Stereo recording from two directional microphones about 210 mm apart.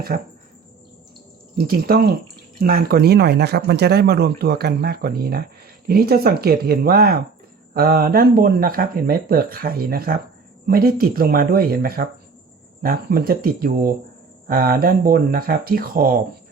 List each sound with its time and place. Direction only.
1.5 s speech: 45° right (ahead or behind)